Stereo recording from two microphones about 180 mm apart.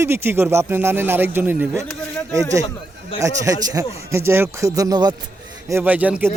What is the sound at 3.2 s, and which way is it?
Speech, 20° right (ahead or behind).